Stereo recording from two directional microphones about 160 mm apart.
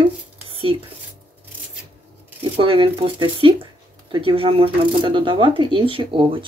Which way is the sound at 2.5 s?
35° right (ahead or behind).